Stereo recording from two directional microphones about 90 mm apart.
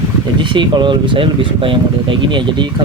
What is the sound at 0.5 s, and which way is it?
Speech, 60° right (ahead or behind).